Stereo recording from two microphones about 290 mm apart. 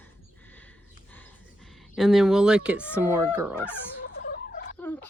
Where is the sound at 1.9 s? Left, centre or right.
Centre.